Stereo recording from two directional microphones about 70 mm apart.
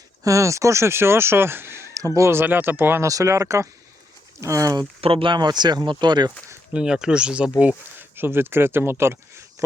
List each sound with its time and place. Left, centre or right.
0.3 s speech: right
2.3 s speech: right
3.1 s speech: right
5.3 s speech: right
6.7 s speech: centre
7.9 s speech: right